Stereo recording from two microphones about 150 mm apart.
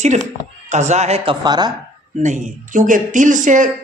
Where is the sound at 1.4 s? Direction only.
30° right (ahead or behind).